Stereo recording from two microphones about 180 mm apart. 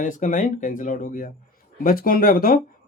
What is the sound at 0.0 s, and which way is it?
Speech, 45° left (ahead or behind).